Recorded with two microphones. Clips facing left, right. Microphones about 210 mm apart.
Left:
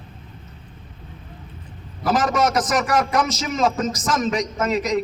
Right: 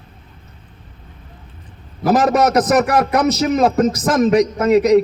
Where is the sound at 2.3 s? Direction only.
60° right (ahead or behind).